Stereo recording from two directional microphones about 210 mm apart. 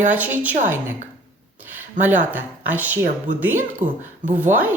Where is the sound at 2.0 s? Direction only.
10° right (ahead or behind).